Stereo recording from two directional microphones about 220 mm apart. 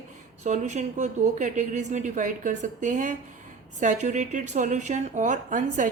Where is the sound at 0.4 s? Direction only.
35° right (ahead or behind).